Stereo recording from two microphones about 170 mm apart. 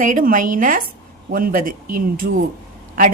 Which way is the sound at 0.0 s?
50° right (ahead or behind).